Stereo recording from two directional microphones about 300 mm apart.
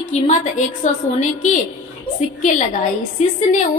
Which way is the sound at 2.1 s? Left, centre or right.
Left.